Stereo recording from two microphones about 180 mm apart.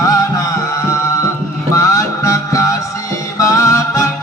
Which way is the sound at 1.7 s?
15° left (ahead or behind).